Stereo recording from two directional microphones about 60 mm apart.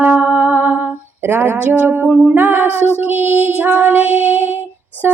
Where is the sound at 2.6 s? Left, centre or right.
Left.